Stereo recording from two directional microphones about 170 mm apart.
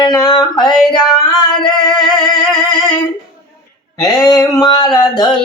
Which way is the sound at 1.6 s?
30° left (ahead or behind).